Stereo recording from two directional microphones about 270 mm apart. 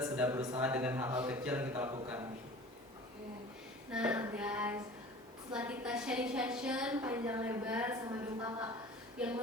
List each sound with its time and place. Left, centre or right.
0.0 s speech: centre
3.9 s a woman's voice: centre